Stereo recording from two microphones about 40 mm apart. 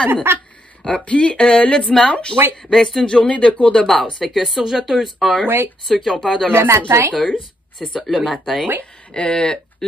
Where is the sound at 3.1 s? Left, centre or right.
Left.